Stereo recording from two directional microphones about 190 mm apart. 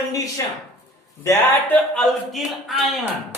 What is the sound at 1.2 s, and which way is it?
Speech, 15° left (ahead or behind).